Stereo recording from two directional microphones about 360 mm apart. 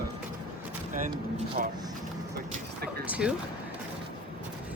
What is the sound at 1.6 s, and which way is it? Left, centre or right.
Speech, right.